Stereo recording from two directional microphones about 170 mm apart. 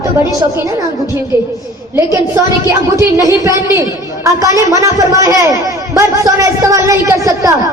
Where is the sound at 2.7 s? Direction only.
20° right (ahead or behind).